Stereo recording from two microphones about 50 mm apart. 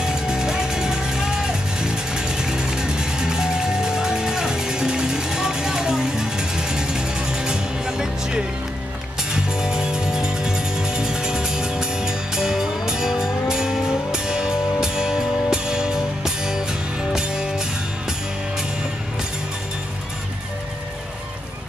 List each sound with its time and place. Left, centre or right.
0.0 s music: centre